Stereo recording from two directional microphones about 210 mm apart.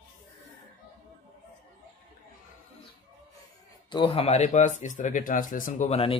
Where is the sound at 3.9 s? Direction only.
25° left (ahead or behind).